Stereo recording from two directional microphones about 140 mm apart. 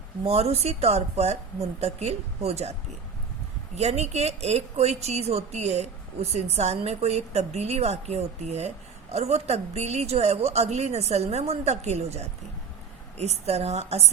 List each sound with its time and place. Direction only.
0.3 s a woman's voice: 50° right (ahead or behind)
3.8 s a woman's voice: 50° right (ahead or behind)